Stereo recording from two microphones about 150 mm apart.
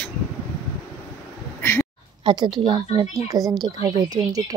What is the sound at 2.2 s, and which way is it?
A woman's voice, 30° right (ahead or behind).